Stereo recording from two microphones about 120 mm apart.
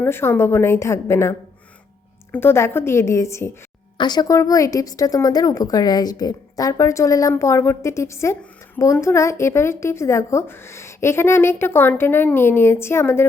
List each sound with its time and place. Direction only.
0.0 s a woman's voice: 20° left (ahead or behind)
3.9 s a woman's voice: 35° left (ahead or behind); by 13.2 s 20° left (ahead or behind)